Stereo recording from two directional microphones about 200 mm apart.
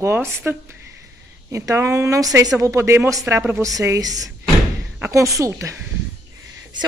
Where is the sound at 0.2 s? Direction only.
5° left (ahead or behind).